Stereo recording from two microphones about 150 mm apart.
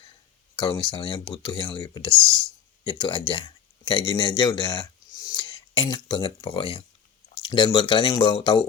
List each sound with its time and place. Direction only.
0.5 s speech: 30° left (ahead or behind)